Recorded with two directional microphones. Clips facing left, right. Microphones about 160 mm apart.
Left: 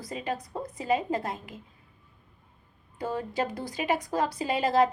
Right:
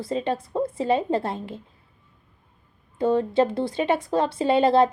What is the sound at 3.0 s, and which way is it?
Speech, 25° right (ahead or behind).